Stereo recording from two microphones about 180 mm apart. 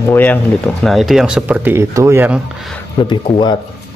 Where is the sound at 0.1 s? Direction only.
10° left (ahead or behind).